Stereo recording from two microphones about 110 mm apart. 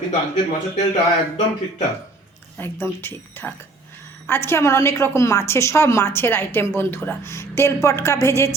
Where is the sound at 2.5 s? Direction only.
20° left (ahead or behind).